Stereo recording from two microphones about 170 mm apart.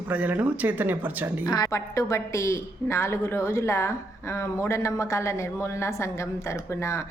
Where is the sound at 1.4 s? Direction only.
25° left (ahead or behind).